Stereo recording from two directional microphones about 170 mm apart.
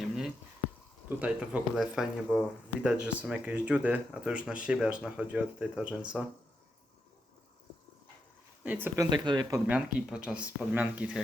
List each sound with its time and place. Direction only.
1.2 s speech: 5° right (ahead or behind)
8.6 s speech: 10° right (ahead or behind)
9.0 s speech: 25° right (ahead or behind)
9.6 s speech: 5° right (ahead or behind)